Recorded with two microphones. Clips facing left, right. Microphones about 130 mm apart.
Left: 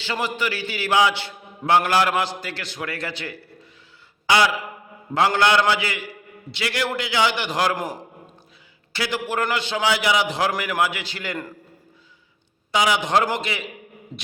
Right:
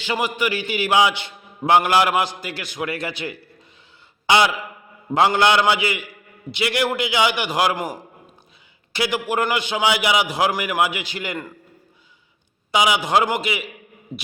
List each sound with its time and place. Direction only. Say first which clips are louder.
0.0 s a man's voice: right 3 dB; 15° right (ahead or behind)
4.3 s a sound: right 2 dB; 20° right (ahead or behind)
5.1 s a man's voice: right 2 dB; 20° right (ahead or behind); by 8.0 s centre (ahead or behind)
8.9 s a man's voice: right 3 dB; 15° right (ahead or behind)
12.7 s a man's voice: right 1 dB; 15° right (ahead or behind)